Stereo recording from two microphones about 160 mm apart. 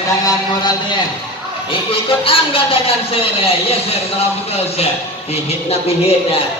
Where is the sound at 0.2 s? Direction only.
25° left (ahead or behind).